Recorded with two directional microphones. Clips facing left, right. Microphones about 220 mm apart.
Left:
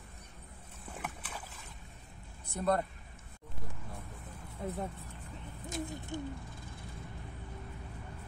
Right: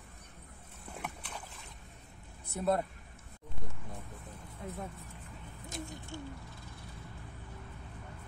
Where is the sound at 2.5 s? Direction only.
5° right (ahead or behind).